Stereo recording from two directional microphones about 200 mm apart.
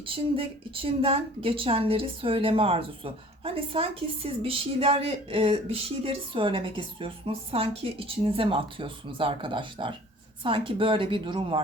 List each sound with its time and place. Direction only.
0.0 s a woman's voice: 25° right (ahead or behind)